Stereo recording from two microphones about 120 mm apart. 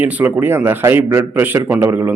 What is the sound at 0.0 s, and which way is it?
A man's voice, 15° right (ahead or behind).